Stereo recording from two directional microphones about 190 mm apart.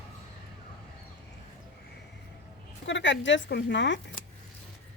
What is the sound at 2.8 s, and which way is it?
Speech, 75° left (ahead or behind).